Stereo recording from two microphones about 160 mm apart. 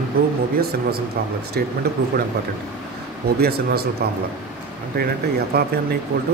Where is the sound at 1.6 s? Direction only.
80° right.